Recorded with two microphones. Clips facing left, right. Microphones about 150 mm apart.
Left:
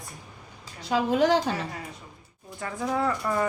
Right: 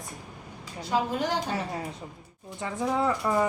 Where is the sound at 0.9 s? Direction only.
90° left.